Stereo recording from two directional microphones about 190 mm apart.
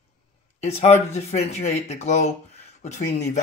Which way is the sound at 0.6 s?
35° left (ahead or behind).